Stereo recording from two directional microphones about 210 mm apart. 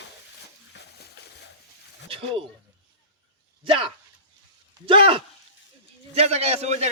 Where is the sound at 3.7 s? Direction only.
25° right (ahead or behind).